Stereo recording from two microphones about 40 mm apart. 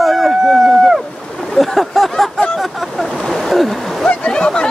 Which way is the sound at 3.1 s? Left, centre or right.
Centre.